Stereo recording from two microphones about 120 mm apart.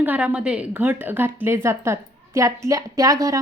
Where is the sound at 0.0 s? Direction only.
15° right (ahead or behind).